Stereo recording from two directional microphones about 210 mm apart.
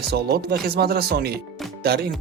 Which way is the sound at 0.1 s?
50° right (ahead or behind).